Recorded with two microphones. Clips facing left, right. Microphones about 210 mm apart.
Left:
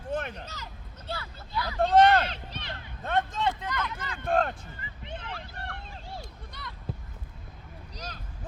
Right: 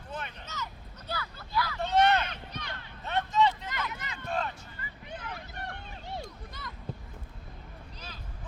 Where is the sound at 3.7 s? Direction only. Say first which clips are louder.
Left 3 dB; 20° right (ahead or behind).